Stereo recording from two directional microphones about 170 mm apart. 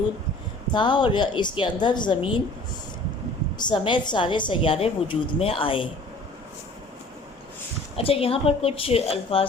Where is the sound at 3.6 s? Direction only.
25° left (ahead or behind).